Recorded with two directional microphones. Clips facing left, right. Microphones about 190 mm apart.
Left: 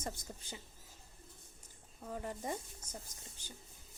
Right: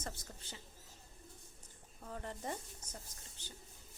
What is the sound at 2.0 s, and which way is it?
Speech, 10° left (ahead or behind).